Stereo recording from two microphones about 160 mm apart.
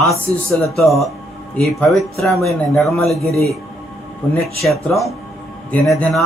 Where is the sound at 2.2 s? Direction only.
Centre (ahead or behind).